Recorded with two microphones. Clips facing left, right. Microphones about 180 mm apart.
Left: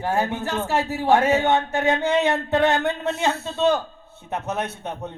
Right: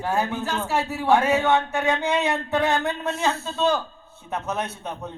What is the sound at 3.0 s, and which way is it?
A man's voice, 25° left (ahead or behind).